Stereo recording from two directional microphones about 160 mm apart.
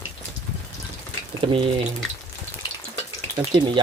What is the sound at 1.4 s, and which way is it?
Speech, 30° right (ahead or behind).